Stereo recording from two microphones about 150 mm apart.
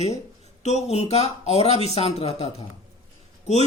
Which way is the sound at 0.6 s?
45° left (ahead or behind).